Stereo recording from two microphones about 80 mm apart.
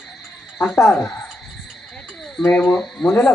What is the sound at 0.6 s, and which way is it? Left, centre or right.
Speech, left.